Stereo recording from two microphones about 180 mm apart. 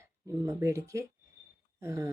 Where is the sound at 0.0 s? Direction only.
15° right (ahead or behind).